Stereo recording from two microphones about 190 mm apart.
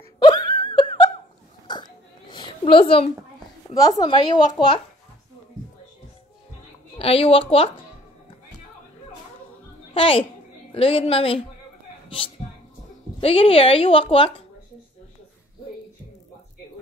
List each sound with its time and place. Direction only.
0.2 s laughter: 25° left (ahead or behind)
2.3 s a sound: 25° left (ahead or behind)
3.7 s a woman's voice: 20° left (ahead or behind)
7.0 s speech: 30° left (ahead or behind)
9.9 s a woman's voice: 30° left (ahead or behind)
13.2 s a woman's voice: 30° left (ahead or behind)